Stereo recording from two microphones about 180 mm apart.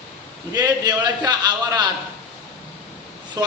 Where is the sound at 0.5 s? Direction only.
20° right (ahead or behind).